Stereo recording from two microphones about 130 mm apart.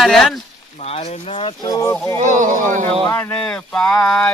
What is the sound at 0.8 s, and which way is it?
Speech, 50° left (ahead or behind).